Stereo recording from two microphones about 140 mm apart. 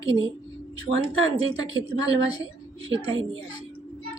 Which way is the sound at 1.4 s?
30° left (ahead or behind).